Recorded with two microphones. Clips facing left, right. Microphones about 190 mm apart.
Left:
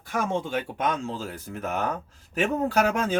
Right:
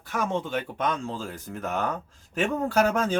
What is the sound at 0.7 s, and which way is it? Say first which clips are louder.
Speech: left 1 dB; 5° left (ahead or behind).